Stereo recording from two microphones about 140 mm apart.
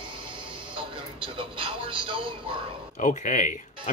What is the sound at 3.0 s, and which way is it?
Speech, 70° left (ahead or behind).